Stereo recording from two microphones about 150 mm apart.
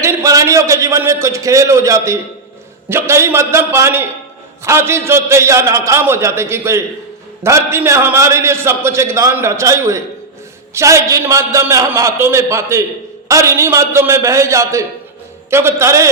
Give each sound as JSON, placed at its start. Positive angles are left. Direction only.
{"t": 0.0, "sound": "a man's voice", "side_deg": -20}